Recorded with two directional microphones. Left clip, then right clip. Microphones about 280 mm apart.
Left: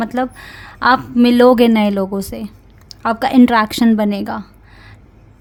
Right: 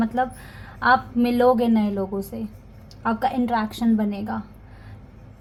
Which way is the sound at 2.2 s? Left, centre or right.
Left.